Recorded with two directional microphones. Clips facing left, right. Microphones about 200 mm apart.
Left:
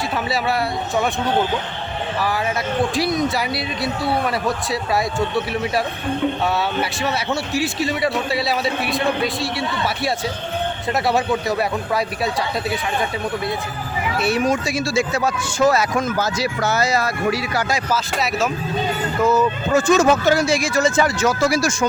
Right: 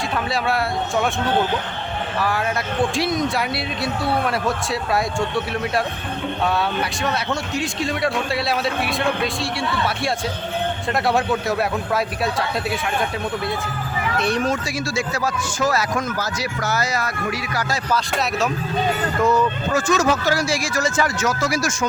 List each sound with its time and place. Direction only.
0.3 s a man's voice: centre (ahead or behind)
2.2 s a man's voice: centre (ahead or behind)
7.0 s a man's voice: 5° left (ahead or behind)
14.2 s speech: 5° left (ahead or behind); by 17.7 s 30° left (ahead or behind)
17.9 s a man's voice: centre (ahead or behind)
19.7 s speech: 25° left (ahead or behind)